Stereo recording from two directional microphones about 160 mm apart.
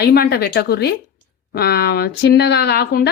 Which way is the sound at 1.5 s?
75° left (ahead or behind).